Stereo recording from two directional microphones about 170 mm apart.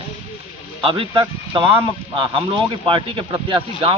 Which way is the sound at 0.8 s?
30° right (ahead or behind).